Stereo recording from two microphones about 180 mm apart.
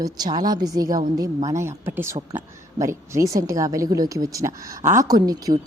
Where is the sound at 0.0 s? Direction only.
20° right (ahead or behind).